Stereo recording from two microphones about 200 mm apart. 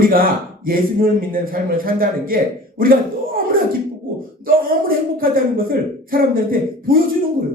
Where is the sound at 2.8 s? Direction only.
45° right (ahead or behind).